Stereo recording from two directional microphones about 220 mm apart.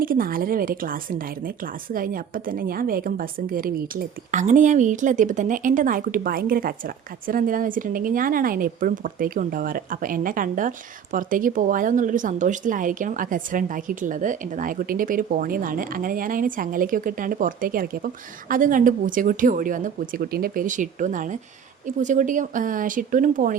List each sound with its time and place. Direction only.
0.0 s a woman's voice: 40° right (ahead or behind)